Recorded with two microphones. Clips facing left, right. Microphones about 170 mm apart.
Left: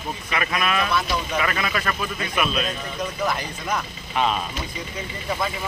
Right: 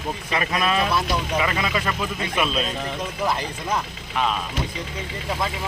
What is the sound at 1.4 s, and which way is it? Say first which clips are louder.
Speech: right 1 dB; 20° right (ahead or behind).